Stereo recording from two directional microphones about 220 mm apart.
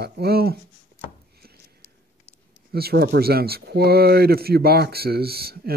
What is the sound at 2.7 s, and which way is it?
Speech, 45° right (ahead or behind).